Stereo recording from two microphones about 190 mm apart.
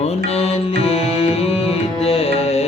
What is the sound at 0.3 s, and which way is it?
Music, 30° left (ahead or behind).